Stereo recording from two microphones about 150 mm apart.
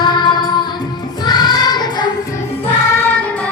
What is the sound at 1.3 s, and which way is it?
Choir, 30° left (ahead or behind).